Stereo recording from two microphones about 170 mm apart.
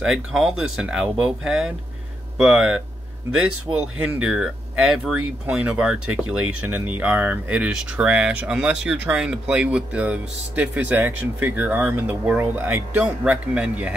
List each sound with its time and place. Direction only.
0.0 s speech: centre (ahead or behind)
3.8 s speech: 5° right (ahead or behind)